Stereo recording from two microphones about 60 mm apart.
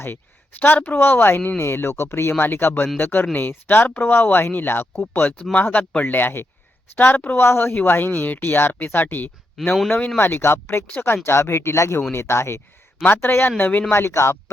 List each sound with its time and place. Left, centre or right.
0.6 s speech: left
0.9 s speech: left
7.4 s speech: left
13.1 s speech: left
13.9 s speech: left